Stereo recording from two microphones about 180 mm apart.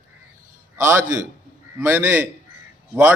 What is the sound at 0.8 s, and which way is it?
A man's voice, 15° right (ahead or behind).